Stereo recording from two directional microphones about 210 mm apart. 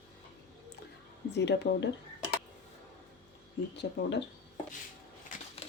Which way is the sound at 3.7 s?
55° left (ahead or behind).